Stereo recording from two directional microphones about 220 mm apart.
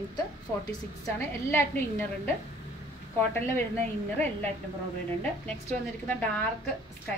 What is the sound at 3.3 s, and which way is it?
Speech, 10° left (ahead or behind).